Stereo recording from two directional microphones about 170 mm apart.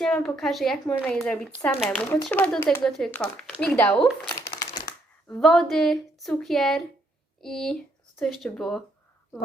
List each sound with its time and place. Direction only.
0.0 s speech: 5° left (ahead or behind)
4.4 s crumpling: 20° left (ahead or behind)
5.3 s speech: centre (ahead or behind)